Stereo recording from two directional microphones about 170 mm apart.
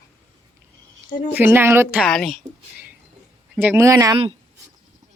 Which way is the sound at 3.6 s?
15° right (ahead or behind).